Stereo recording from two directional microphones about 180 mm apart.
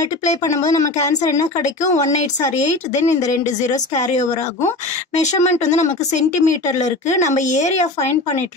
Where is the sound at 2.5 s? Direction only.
40° left (ahead or behind).